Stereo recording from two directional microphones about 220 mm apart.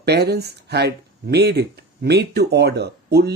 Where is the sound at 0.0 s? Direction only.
50° right (ahead or behind).